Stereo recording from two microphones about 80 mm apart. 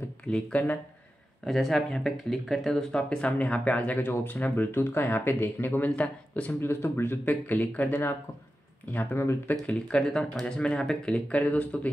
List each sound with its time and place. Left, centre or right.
0.3 s speech: centre
1.4 s speech: centre
6.6 s speech: left
9.7 s speech: centre